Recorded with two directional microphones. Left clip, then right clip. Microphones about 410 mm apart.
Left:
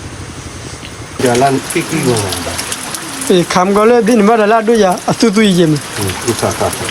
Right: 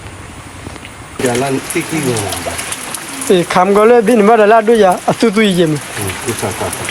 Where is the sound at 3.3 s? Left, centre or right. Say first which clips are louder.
Right 1 dB; centre.